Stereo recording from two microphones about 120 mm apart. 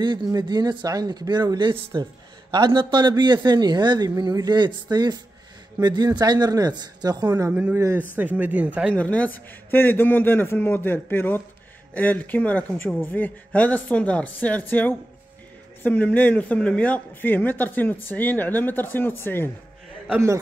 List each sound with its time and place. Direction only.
0.0 s speech: 35° right (ahead or behind)
7.5 s speech: 15° right (ahead or behind)
8.9 s a man's voice: 10° left (ahead or behind)